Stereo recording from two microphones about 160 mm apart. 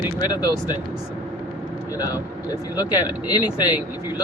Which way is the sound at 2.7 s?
25° left (ahead or behind).